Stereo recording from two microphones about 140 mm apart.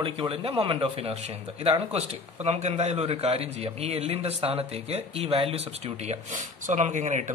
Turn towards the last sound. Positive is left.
turn(degrees=-60)  # may be behind; listen again after turning